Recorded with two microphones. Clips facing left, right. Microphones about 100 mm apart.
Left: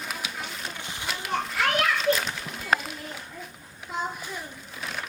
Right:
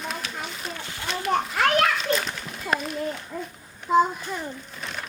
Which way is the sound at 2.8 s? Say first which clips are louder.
Right 8 dB; centre (ahead or behind).